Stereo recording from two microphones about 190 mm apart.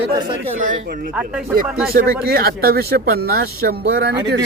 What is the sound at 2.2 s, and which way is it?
Speech, 55° right (ahead or behind).